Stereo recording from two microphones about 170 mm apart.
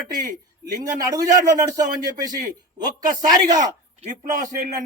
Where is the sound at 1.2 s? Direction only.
20° right (ahead or behind).